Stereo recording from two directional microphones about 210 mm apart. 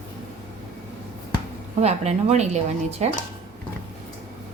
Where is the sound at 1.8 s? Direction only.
30° right (ahead or behind).